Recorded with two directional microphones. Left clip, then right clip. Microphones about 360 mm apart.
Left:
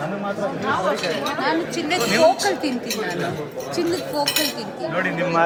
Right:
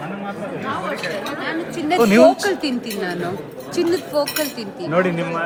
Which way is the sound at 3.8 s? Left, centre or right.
Right.